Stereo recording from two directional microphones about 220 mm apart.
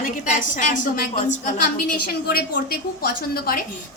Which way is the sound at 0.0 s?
35° left (ahead or behind).